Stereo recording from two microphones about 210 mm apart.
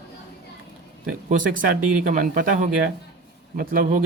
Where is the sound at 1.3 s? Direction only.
40° right (ahead or behind).